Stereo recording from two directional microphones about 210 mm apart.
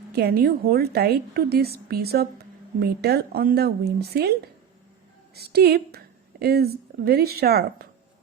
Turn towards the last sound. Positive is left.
turn(degrees=-50)  # may be behind; listen again after turning